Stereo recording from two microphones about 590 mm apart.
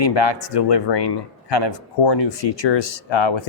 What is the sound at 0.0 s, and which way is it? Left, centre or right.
Speech, left.